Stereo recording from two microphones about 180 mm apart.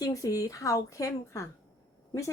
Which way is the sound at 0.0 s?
20° left (ahead or behind).